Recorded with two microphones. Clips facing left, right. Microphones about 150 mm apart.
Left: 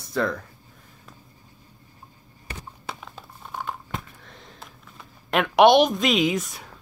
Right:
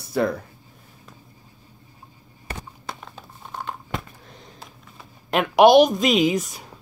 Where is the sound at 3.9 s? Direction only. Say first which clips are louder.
Right 6 dB; 85° right.